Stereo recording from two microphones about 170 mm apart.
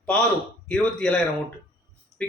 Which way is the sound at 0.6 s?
5° left (ahead or behind).